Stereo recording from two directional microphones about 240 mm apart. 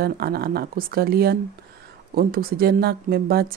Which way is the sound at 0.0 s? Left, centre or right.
Right.